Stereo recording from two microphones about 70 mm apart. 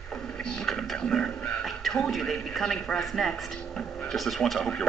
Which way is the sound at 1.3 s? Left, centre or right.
Centre.